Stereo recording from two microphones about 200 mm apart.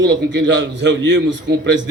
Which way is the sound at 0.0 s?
60° right (ahead or behind).